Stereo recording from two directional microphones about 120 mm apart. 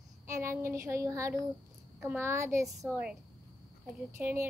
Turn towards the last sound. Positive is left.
turn(degrees=-15)  # may be behind; listen again after turning